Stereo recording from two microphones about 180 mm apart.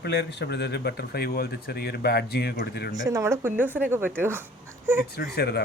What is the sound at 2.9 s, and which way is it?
Speech, 20° right (ahead or behind).